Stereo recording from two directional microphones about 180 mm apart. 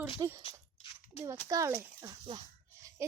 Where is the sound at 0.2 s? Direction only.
20° right (ahead or behind).